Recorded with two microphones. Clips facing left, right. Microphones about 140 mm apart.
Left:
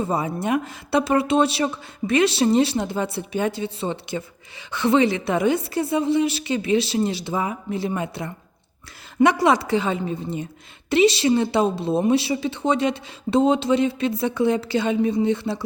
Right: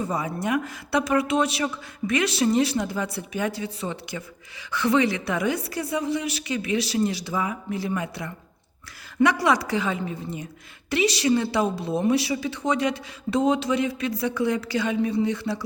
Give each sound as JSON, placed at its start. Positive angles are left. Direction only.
{"t": 0.0, "sound": "a woman's voice", "side_deg": 25}